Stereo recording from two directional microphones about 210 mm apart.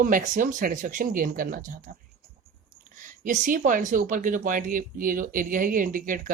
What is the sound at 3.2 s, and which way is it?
Speech, 40° right (ahead or behind).